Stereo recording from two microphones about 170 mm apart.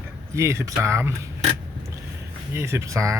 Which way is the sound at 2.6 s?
15° right (ahead or behind).